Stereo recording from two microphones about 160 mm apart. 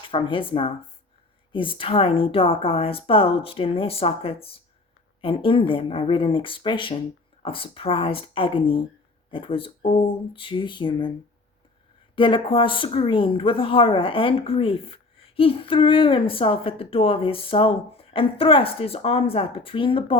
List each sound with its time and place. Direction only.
0.1 s speech: 35° left (ahead or behind)
12.1 s speech: 30° left (ahead or behind)